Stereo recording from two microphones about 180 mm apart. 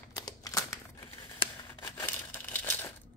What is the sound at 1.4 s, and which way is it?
Scissors, 20° left (ahead or behind).